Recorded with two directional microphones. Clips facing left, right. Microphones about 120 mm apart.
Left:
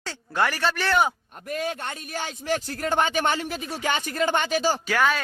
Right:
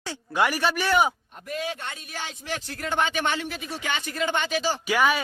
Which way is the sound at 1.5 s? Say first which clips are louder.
Left 2 dB; 50° left (ahead or behind).